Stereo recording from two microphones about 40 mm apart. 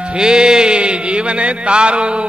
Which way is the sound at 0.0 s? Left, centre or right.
Right.